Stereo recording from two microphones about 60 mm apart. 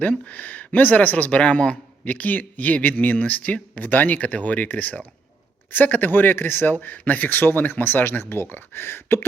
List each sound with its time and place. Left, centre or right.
0.0 s speech: left